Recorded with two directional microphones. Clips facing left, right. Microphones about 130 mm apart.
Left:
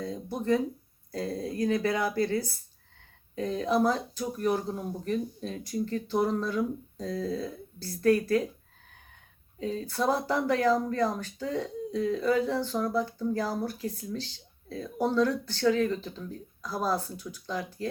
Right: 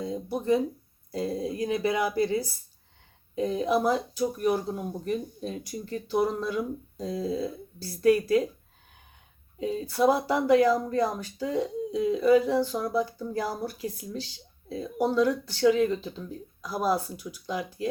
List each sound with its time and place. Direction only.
0.0 s speech: 15° right (ahead or behind)
9.6 s speech: 15° right (ahead or behind)